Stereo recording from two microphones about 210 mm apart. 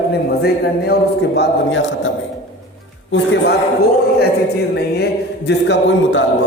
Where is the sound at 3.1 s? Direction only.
55° left (ahead or behind).